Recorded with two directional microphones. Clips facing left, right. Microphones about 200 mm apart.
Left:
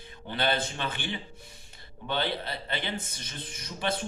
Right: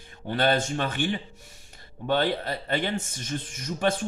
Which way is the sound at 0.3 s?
45° right (ahead or behind).